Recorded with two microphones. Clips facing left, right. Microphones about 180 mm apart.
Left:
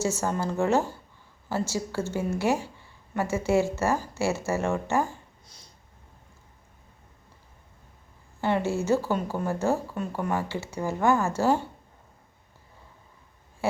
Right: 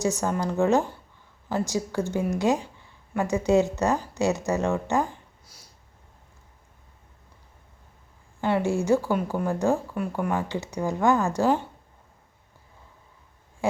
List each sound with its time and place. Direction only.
0.0 s speech: 15° right (ahead or behind)
5.5 s a sound: 5° right (ahead or behind)
8.4 s a woman's voice: 15° right (ahead or behind)